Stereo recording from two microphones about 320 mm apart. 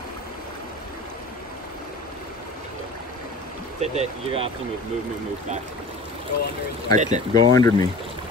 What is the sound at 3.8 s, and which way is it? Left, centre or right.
Speech, centre.